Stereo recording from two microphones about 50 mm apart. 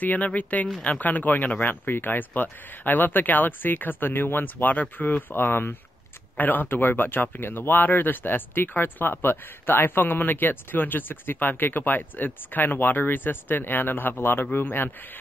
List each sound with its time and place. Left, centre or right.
0.0 s speech: left
5.3 s speech: left